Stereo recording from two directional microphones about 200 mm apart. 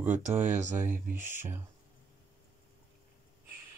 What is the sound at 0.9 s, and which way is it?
Speech, 40° right (ahead or behind).